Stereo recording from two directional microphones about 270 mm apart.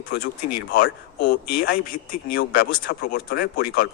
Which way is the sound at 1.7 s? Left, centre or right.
Left.